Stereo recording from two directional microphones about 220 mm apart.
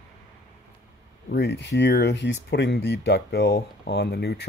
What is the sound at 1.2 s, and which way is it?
Speech, 50° left (ahead or behind).